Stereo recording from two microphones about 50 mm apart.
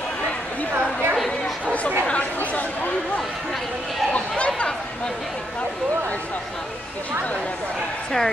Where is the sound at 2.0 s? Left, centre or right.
Left.